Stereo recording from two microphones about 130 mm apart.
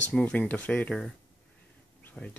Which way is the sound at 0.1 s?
10° left (ahead or behind).